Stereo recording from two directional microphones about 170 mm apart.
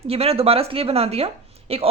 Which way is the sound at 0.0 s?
35° right (ahead or behind).